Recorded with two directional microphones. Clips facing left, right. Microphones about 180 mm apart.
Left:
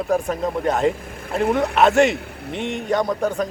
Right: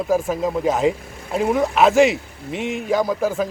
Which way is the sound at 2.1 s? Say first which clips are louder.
Even; 65° left (ahead or behind).